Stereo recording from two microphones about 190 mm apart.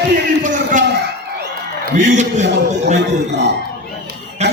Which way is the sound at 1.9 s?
40° right (ahead or behind).